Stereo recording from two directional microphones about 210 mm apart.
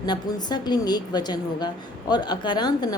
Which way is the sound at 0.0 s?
20° left (ahead or behind).